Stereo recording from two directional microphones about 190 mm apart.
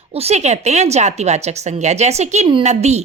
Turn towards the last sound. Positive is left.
turn(degrees=-35)  # may be behind; listen again after turning